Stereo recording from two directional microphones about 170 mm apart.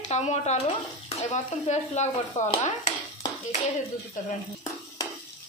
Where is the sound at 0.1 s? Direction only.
40° left (ahead or behind).